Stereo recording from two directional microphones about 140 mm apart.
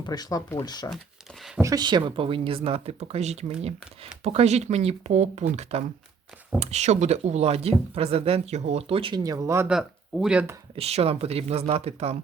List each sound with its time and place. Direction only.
0.0 s speech: 30° left (ahead or behind)
1.6 s speech: 30° right (ahead or behind)
9.6 s speech: 5° right (ahead or behind)
10.8 s speech: 45° right (ahead or behind)